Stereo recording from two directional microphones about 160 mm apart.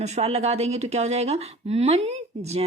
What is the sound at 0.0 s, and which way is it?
Speech, 40° right (ahead or behind).